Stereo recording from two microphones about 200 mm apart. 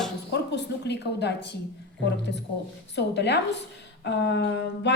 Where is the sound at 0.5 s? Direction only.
60° left (ahead or behind).